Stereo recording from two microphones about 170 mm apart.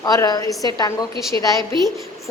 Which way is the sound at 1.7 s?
30° right (ahead or behind).